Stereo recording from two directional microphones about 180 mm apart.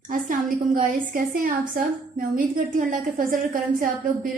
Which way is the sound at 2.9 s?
50° right (ahead or behind).